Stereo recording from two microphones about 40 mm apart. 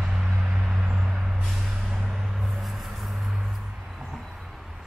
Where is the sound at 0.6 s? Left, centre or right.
Right.